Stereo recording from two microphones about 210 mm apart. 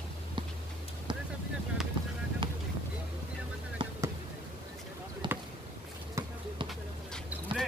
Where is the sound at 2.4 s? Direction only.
25° right (ahead or behind).